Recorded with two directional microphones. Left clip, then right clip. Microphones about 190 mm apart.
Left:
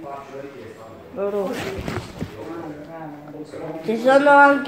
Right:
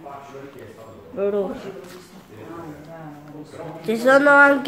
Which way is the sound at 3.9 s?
20° right (ahead or behind).